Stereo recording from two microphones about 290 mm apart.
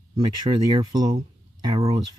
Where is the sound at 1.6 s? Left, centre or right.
Centre.